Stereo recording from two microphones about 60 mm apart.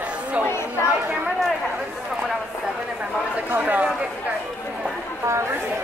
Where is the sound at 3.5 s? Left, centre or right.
Right.